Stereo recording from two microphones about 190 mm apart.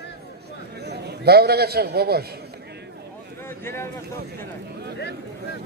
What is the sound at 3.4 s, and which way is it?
Speech, 15° left (ahead or behind).